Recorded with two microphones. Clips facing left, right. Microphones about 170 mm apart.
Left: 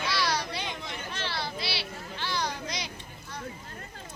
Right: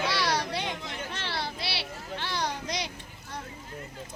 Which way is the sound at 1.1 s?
60° right (ahead or behind).